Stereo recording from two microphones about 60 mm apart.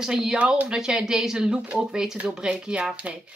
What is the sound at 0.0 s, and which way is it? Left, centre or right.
Speech, centre.